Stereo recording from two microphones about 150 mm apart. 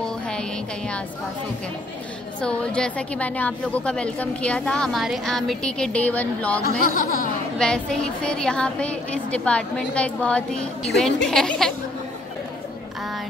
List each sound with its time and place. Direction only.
0.0 s music: 5° left (ahead or behind)
2.4 s a woman's voice: 5° left (ahead or behind)
6.6 s speech: 70° left (ahead or behind)
7.5 s a woman's voice: 5° left (ahead or behind)